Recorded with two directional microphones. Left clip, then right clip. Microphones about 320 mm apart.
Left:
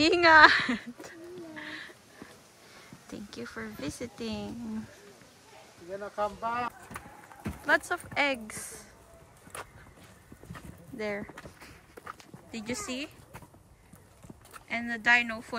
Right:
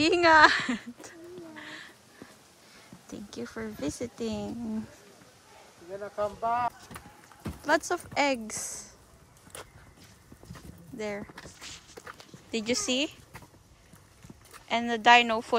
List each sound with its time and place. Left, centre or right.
0.0 s a sound: centre
3.1 s speech: centre
5.9 s speech: left
7.6 s speech: centre
11.0 s speech: centre
12.4 s speech: centre
14.7 s speech: centre